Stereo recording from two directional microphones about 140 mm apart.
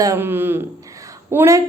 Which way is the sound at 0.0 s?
20° right (ahead or behind).